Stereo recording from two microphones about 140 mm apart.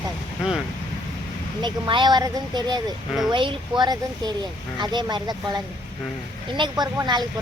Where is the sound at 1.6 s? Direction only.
35° right (ahead or behind).